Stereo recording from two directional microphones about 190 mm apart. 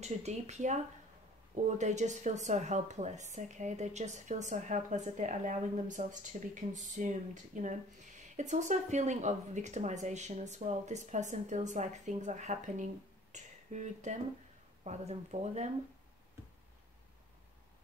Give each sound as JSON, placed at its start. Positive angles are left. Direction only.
{"t": 0.0, "sound": "speech", "side_deg": -35}